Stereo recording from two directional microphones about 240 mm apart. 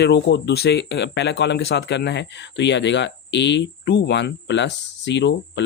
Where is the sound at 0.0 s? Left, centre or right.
Left.